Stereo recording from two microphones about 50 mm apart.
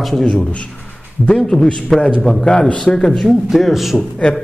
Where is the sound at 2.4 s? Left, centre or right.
Left.